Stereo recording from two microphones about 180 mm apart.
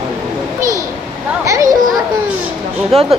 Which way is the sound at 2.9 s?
35° right (ahead or behind).